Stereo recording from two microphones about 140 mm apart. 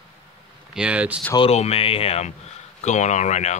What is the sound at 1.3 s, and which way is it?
Speech, 45° left (ahead or behind).